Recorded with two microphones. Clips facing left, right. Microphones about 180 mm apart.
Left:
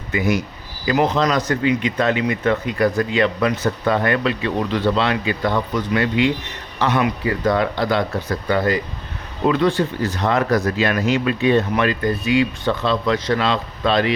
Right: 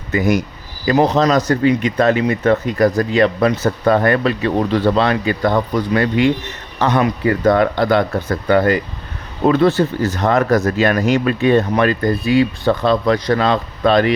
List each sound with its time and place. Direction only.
0.1 s speech: 45° right (ahead or behind)
9.5 s speech: 40° right (ahead or behind)